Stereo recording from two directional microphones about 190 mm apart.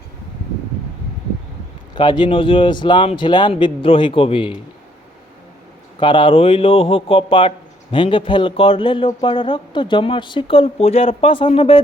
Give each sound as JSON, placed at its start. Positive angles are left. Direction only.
{"t": 2.0, "sound": "a man's voice", "side_deg": 25}
{"t": 6.0, "sound": "a man's voice", "side_deg": 25}